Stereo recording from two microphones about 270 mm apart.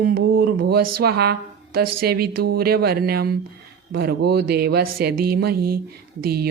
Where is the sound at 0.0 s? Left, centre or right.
Right.